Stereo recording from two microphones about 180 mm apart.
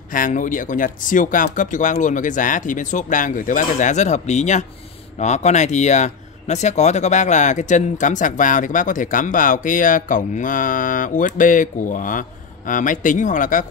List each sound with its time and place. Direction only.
0.1 s speech: 45° left (ahead or behind)